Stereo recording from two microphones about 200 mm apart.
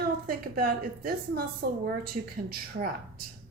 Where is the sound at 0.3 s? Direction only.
45° right (ahead or behind).